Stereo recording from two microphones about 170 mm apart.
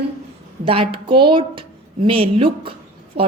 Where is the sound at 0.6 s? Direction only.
30° right (ahead or behind).